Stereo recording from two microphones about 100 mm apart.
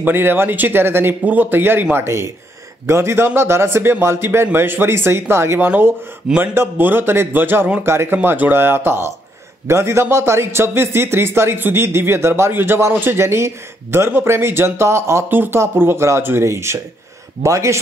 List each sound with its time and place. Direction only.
0.0 s a man's voice: 20° right (ahead or behind)